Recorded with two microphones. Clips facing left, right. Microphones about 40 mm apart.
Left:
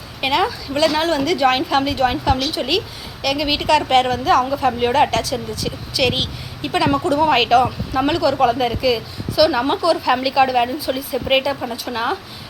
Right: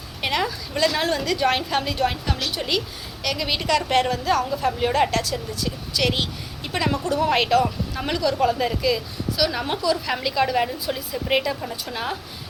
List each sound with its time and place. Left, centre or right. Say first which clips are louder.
0.2 s speech: left 6 dB; left